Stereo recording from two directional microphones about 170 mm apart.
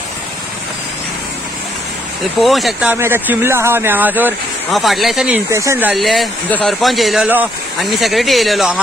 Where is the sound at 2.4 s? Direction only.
Centre (ahead or behind).